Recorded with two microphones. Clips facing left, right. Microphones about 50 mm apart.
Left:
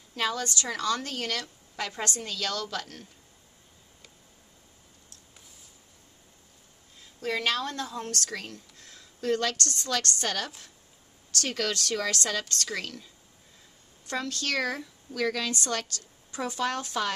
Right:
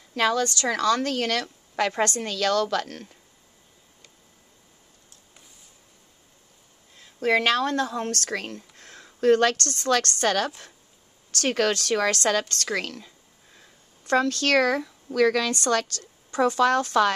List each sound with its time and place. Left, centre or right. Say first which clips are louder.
0.1 s speech: right 7 dB; right
0.7 s a woman's voice: right 8 dB; right
7.2 s a woman's voice: right 7 dB; right
15.5 s speech: right 7 dB; right